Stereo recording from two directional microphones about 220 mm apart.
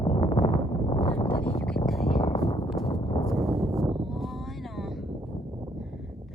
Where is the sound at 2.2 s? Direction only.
30° left (ahead or behind).